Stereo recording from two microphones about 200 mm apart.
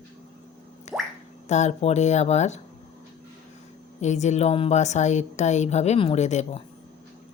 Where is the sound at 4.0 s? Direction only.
35° left (ahead or behind).